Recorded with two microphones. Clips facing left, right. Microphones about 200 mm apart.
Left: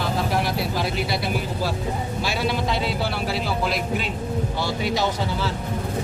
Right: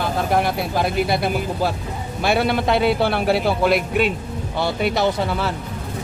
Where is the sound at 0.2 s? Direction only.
55° right (ahead or behind).